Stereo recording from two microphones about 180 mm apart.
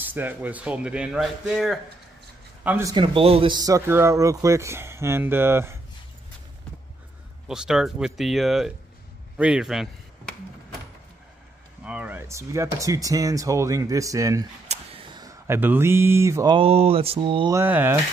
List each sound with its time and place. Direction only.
0.0 s speech: 10° right (ahead or behind)
2.9 s speech: 30° right (ahead or behind); by 5.8 s 15° right (ahead or behind)
7.4 s speech: 5° right (ahead or behind)
11.8 s speech: 10° right (ahead or behind)
16.5 s a sound: 30° right (ahead or behind)
17.6 s speech: 10° right (ahead or behind)